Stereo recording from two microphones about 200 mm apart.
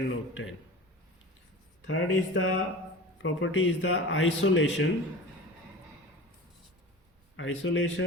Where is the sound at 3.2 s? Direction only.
70° left (ahead or behind).